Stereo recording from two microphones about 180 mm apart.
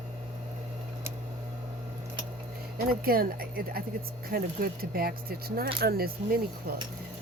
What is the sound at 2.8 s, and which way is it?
Speech, 55° right (ahead or behind).